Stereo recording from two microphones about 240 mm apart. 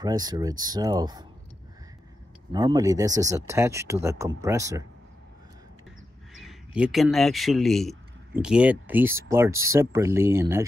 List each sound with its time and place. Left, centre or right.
0.0 s speech: centre
2.5 s speech: centre
6.3 s speech: centre